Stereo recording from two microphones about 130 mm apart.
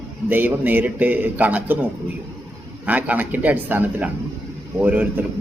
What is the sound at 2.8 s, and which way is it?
A man's voice, 10° right (ahead or behind).